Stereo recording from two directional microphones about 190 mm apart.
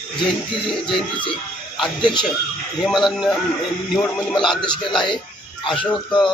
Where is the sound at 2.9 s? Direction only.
Centre (ahead or behind).